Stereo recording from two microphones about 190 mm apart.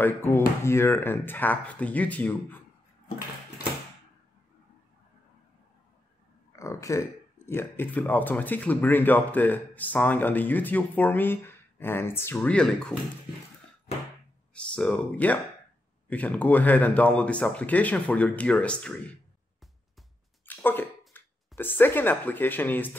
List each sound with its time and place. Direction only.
0.0 s speech: 10° left (ahead or behind)
6.5 s speech: 15° left (ahead or behind)
13.9 s a sound: 35° left (ahead or behind)
14.5 s speech: 5° left (ahead or behind)
20.4 s a sound: 10° left (ahead or behind)
21.1 s speech: 10° left (ahead or behind)